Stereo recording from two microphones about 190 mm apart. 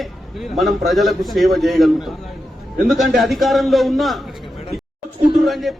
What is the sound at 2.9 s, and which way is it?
A man's voice, centre (ahead or behind).